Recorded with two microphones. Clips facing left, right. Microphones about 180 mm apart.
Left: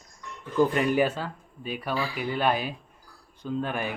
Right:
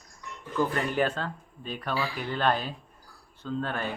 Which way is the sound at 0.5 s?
15° left (ahead or behind).